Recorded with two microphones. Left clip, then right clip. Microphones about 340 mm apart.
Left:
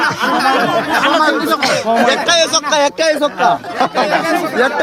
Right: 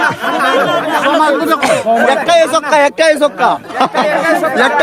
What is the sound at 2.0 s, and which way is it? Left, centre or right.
Speech, centre.